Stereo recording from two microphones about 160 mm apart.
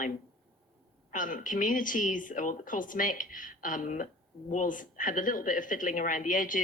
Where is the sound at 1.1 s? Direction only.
55° left (ahead or behind).